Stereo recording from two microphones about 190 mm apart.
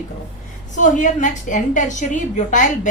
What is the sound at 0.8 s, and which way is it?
Speech, 40° left (ahead or behind).